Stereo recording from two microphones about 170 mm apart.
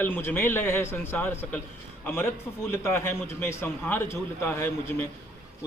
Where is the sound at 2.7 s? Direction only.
15° left (ahead or behind).